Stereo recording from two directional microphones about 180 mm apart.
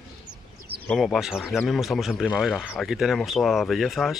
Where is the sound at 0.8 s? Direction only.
Centre (ahead or behind).